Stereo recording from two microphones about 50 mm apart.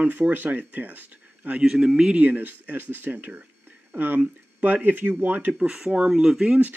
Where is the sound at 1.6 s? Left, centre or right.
Centre.